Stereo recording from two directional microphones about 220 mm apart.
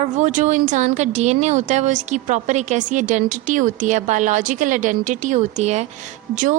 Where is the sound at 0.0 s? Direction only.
35° right (ahead or behind).